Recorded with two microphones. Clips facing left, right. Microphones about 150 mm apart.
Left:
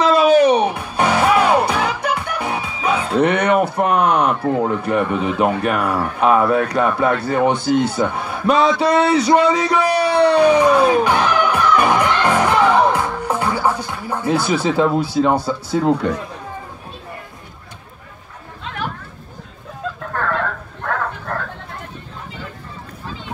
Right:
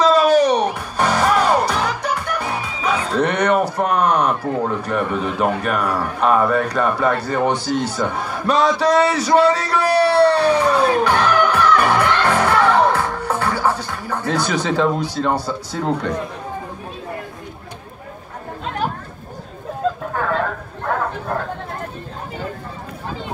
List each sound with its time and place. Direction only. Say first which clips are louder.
0.5 s music: left 2 dB; 10° left (ahead or behind)
3.7 s speech: left 1 dB; 10° left (ahead or behind)
7.5 s a man's voice: left 4 dB; 55° left (ahead or behind)
8.0 s a man's voice: left 2 dB; 10° left (ahead or behind)
20.1 s a sound: right 1 dB; 10° right (ahead or behind)